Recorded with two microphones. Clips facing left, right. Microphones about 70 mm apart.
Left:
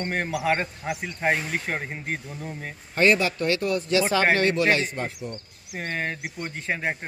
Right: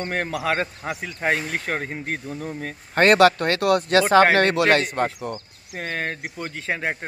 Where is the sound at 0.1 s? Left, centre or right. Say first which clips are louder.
Even; right.